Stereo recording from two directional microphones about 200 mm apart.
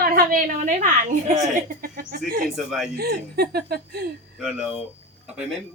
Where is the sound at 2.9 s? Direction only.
50° right (ahead or behind).